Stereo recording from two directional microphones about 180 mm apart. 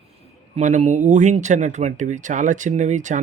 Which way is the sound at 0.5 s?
40° right (ahead or behind).